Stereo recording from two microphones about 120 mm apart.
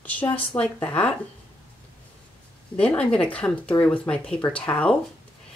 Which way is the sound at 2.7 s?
10° left (ahead or behind).